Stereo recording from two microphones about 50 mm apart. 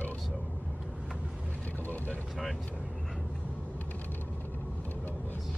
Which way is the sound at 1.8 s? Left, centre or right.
Left.